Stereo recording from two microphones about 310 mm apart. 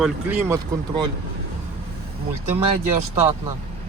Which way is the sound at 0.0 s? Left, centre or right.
Centre.